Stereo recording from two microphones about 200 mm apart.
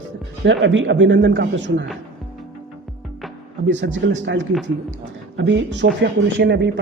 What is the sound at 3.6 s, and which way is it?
Speech, 65° right (ahead or behind).